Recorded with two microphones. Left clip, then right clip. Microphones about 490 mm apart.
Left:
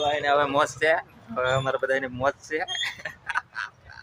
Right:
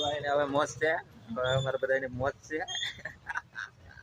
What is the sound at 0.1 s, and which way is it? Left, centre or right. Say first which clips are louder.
A man's voice: left 7 dB; right.